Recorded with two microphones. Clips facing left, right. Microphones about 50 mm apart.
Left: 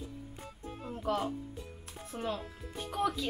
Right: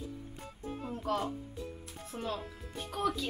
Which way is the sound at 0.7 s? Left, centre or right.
Centre.